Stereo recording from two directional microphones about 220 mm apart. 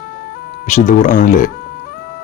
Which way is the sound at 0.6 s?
35° left (ahead or behind).